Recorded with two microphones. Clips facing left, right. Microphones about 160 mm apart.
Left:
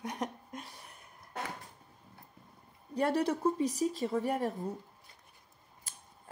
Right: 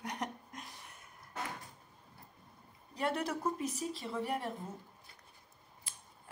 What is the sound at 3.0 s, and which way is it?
A woman's voice, 35° left (ahead or behind).